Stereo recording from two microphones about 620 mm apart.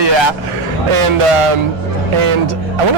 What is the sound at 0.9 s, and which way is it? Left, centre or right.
Speech, right.